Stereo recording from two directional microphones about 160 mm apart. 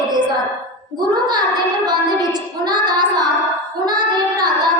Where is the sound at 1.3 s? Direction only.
25° right (ahead or behind).